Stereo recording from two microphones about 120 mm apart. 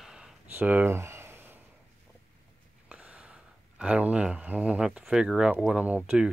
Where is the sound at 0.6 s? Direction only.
15° right (ahead or behind).